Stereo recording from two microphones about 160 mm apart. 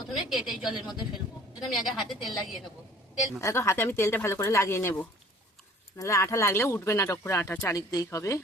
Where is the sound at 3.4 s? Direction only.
15° left (ahead or behind).